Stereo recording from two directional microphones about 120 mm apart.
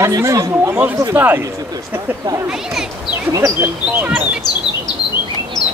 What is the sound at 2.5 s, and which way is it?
Speech, 5° right (ahead or behind).